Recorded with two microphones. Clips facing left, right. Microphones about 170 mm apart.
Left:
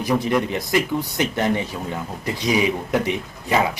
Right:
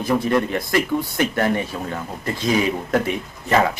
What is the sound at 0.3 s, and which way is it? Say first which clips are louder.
A man's voice: right 1 dB; 15° left (ahead or behind).